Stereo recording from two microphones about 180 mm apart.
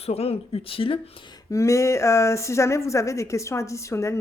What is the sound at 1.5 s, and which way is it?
Speech, 15° left (ahead or behind).